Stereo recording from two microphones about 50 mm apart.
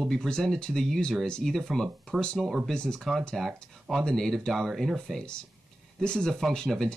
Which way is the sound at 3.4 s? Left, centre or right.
Centre.